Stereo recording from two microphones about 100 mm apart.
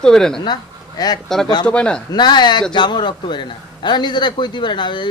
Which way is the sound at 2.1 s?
45° left (ahead or behind).